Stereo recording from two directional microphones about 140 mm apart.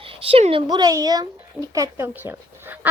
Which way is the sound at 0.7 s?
25° right (ahead or behind).